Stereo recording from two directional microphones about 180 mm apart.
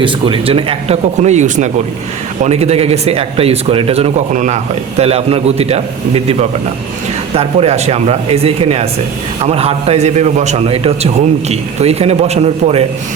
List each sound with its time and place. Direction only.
0.0 s speech: 30° right (ahead or behind)